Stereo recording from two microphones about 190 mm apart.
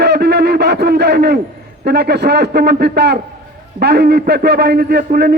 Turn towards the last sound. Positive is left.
turn(degrees=-55)  # may be behind; listen again after turning